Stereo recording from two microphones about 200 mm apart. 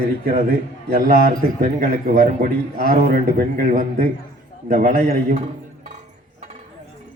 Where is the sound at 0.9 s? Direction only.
40° right (ahead or behind).